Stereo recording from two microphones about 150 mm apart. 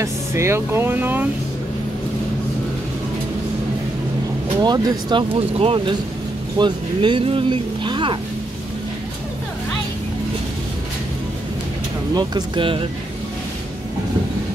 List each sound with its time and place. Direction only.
0.0 s speech: 20° right (ahead or behind)
4.6 s speech: 25° right (ahead or behind)
5.3 s speech: 40° right (ahead or behind)
12.2 s speech: 30° right (ahead or behind)